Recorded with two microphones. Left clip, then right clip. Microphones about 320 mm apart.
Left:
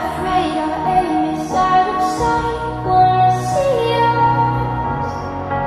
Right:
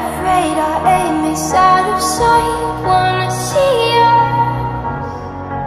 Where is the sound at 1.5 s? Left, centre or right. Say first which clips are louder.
Right 4 dB; right.